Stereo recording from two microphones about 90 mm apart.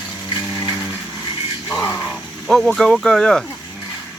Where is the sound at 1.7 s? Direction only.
35° left (ahead or behind).